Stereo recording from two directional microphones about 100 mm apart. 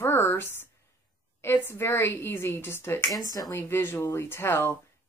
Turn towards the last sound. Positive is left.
turn(degrees=25)  # may be behind; listen again after turning